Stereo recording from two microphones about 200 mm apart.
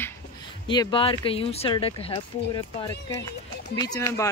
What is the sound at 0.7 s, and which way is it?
A man's voice, 25° left (ahead or behind).